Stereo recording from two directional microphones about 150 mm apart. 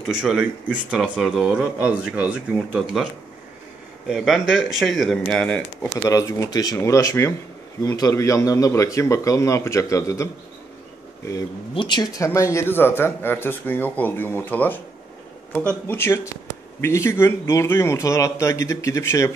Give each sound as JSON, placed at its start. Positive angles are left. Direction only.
{"t": 0.0, "sound": "speech", "side_deg": -5}
{"t": 4.1, "sound": "speech", "side_deg": 0}
{"t": 6.0, "sound": "speech", "side_deg": 20}
{"t": 11.7, "sound": "speech", "side_deg": 30}
{"t": 15.9, "sound": "speech", "side_deg": 15}